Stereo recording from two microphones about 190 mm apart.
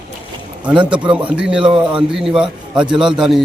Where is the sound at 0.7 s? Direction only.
5° right (ahead or behind).